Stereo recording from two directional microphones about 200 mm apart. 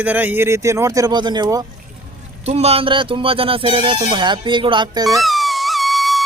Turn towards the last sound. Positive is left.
turn(degrees=0)  # may be behind; listen again after turning